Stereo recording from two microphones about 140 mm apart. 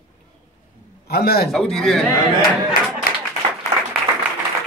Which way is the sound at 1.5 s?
Centre (ahead or behind).